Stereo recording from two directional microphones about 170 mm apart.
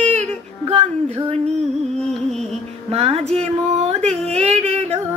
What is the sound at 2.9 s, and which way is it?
Music, 35° right (ahead or behind).